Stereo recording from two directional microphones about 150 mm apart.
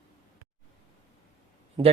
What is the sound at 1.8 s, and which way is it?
Speech, 30° right (ahead or behind).